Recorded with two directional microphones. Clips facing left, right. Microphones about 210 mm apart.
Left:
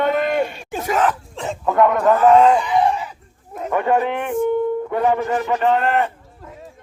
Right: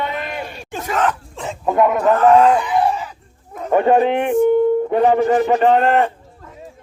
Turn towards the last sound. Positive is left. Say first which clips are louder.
# right 4 dB
turn(degrees=-30)  # may be behind; listen again after turning